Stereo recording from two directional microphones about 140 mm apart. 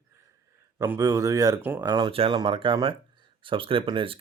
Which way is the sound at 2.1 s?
45° right (ahead or behind).